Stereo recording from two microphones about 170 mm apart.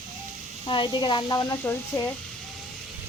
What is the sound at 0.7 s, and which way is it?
Speech, 30° left (ahead or behind).